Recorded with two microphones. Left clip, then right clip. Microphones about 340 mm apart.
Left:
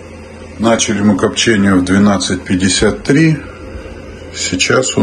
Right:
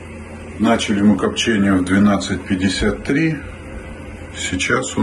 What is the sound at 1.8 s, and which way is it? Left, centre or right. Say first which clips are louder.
A man's voice: left 4 dB; centre.